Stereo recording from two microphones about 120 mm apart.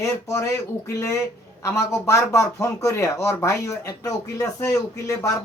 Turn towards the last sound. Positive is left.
turn(degrees=25)  # may be behind; listen again after turning